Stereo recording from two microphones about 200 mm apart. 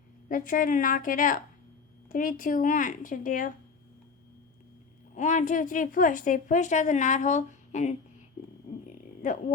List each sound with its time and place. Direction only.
0.3 s a woman's voice: 45° left (ahead or behind)
5.1 s a woman's voice: 35° left (ahead or behind)
8.9 s a sound: 35° left (ahead or behind)